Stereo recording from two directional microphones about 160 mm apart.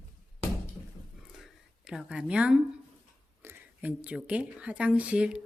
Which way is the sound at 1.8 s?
5° right (ahead or behind).